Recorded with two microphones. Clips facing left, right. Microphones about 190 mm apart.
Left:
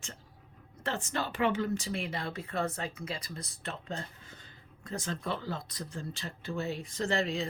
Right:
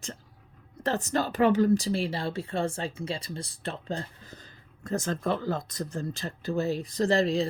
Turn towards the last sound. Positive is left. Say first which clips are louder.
# right 7 dB
turn(degrees=-35)  # may be behind; listen again after turning